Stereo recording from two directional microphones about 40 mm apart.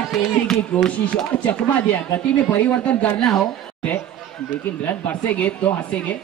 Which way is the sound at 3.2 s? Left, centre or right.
Centre.